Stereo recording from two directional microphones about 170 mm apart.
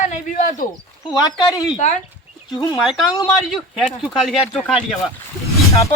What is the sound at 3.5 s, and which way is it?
Speech, centre (ahead or behind).